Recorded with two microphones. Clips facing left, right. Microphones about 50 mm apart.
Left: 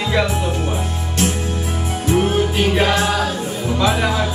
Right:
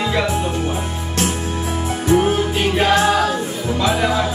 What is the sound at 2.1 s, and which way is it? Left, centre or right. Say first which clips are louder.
Music: right 1 dB; centre.